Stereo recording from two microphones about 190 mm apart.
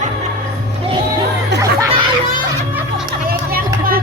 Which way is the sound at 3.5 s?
50° right (ahead or behind).